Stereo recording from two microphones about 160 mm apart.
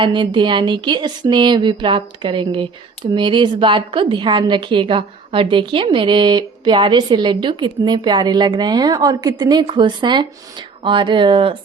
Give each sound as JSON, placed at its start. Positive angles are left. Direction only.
{"t": 0.0, "sound": "a woman's voice", "side_deg": -30}